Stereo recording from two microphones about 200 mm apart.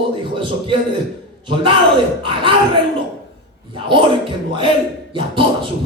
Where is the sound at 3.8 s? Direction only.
25° right (ahead or behind).